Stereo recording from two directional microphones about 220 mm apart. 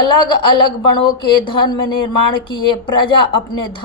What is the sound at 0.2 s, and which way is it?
A woman's voice, 20° left (ahead or behind).